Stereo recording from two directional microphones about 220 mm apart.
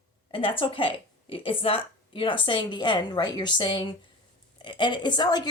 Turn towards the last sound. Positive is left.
turn(degrees=20)  # may be behind; listen again after turning